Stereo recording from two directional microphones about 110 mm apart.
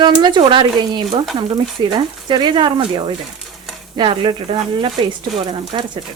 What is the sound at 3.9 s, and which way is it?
Speech, 45° right (ahead or behind).